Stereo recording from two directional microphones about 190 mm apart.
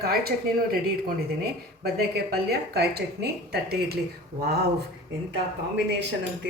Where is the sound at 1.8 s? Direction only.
55° right (ahead or behind).